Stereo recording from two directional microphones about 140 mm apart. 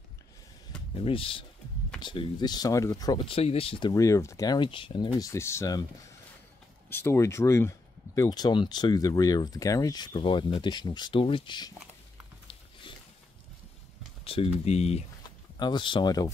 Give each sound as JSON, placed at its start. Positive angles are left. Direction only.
{"t": 1.0, "sound": "speech", "side_deg": 40}
{"t": 3.3, "sound": "speech", "side_deg": 45}
{"t": 3.9, "sound": "speech", "side_deg": 20}
{"t": 4.6, "sound": "speech", "side_deg": 35}
{"t": 5.2, "sound": "speech", "side_deg": 20}
{"t": 6.9, "sound": "speech", "side_deg": 15}
{"t": 14.2, "sound": "a sound", "side_deg": 40}
{"t": 14.6, "sound": "speech", "side_deg": 50}
{"t": 15.6, "sound": "speech", "side_deg": 35}